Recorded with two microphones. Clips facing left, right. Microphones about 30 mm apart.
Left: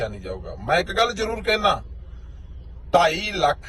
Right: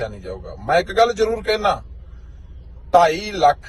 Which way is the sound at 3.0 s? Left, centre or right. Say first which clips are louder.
Right 3 dB; left.